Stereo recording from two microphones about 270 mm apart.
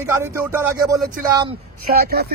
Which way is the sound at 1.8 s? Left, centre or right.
Right.